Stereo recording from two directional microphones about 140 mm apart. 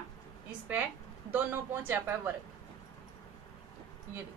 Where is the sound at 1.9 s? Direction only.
15° right (ahead or behind).